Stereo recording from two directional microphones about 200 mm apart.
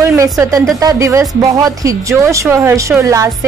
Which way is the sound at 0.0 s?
15° right (ahead or behind).